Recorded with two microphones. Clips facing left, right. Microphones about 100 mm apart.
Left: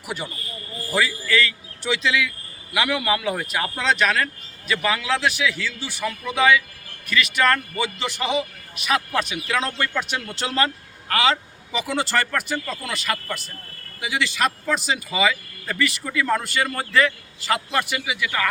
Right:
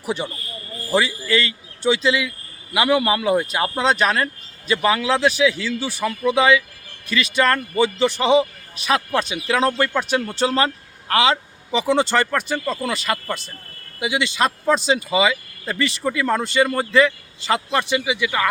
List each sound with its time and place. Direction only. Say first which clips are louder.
0.0 s a man's voice: right 6 dB; 30° right (ahead or behind)
12.5 s a man's voice: right 5 dB; 35° right (ahead or behind)
15.1 s speech: right 3 dB; 20° right (ahead or behind)